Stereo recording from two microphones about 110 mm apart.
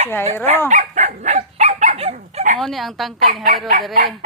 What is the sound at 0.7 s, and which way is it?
Dog, 90° right.